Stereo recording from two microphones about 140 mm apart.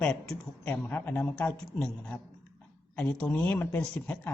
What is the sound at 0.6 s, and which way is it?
Speech, 15° left (ahead or behind).